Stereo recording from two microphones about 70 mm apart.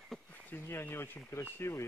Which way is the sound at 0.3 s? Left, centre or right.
Left.